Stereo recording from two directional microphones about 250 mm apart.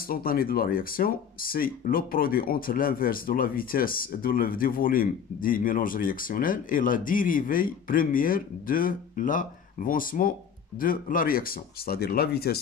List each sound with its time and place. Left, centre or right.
0.1 s speech: left